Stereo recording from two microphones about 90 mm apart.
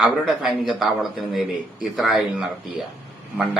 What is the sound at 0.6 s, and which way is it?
Speech, centre (ahead or behind).